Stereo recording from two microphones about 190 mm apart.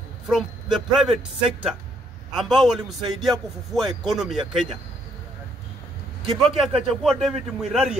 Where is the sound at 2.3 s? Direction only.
Centre (ahead or behind).